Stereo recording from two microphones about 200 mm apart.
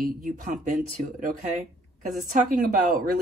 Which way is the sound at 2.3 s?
40° right (ahead or behind).